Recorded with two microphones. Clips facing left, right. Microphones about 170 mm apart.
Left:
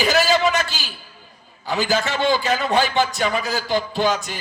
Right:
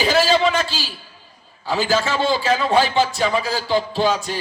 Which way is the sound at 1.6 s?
30° right (ahead or behind).